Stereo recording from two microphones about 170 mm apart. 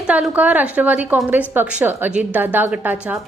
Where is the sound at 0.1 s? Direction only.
10° right (ahead or behind).